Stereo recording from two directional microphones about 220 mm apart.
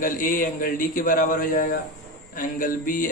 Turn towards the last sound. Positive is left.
turn(degrees=40)  # may be behind; listen again after turning